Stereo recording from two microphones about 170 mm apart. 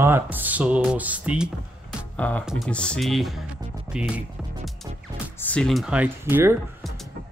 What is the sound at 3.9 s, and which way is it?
Music, 5° right (ahead or behind).